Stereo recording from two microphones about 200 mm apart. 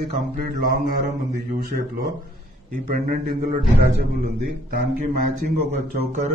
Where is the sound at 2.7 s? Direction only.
40° right (ahead or behind).